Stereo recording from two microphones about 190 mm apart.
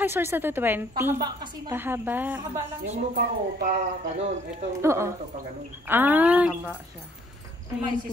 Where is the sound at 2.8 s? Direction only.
35° right (ahead or behind).